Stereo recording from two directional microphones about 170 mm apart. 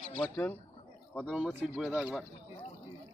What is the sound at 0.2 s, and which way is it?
Speech, 10° left (ahead or behind).